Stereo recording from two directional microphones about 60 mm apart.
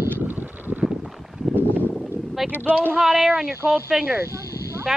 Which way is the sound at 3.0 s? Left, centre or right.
Centre.